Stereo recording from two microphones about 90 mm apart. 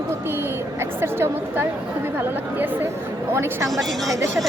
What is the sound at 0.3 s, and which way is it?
A woman's voice, 30° right (ahead or behind).